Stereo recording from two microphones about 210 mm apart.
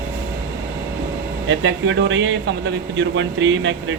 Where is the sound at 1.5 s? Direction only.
65° right (ahead or behind).